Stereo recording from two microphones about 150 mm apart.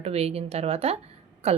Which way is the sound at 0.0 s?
45° right (ahead or behind).